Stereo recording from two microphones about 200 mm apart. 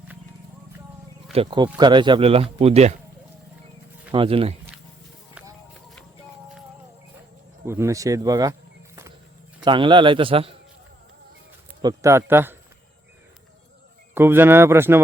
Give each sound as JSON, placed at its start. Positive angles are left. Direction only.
{"t": 1.3, "sound": "speech", "side_deg": -25}
{"t": 4.1, "sound": "speech", "side_deg": -25}
{"t": 7.6, "sound": "speech", "side_deg": -15}
{"t": 9.6, "sound": "speech", "side_deg": -25}
{"t": 11.8, "sound": "speech", "side_deg": -15}
{"t": 14.1, "sound": "speech", "side_deg": -10}